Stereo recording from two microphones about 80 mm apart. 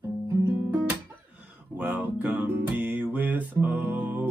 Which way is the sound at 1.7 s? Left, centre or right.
Centre.